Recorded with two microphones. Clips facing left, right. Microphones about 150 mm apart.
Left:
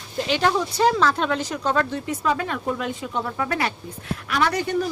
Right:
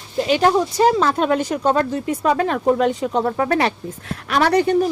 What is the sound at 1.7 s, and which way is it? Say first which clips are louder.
A woman's voice: right 4 dB; 30° right (ahead or behind).